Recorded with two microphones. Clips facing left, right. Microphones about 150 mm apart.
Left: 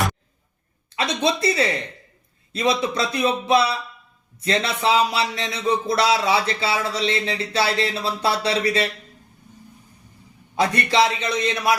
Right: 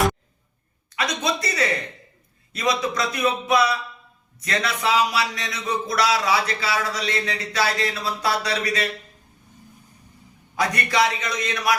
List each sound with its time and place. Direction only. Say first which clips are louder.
0.9 s speech: left 3 dB; 30° left (ahead or behind)
10.6 s speech: left 3 dB; 30° left (ahead or behind)